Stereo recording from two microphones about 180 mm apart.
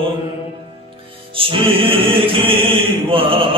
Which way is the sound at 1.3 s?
30° right (ahead or behind).